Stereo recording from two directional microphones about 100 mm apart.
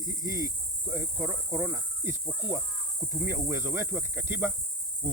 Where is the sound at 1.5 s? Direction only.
25° right (ahead or behind).